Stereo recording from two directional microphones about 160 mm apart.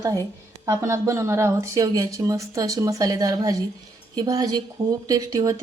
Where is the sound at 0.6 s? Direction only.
20° right (ahead or behind).